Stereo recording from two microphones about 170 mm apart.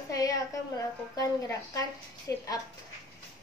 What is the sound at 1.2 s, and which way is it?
A woman's voice, 20° left (ahead or behind).